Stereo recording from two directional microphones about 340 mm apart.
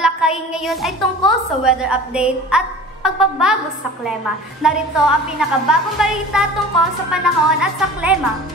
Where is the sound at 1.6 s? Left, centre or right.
Centre.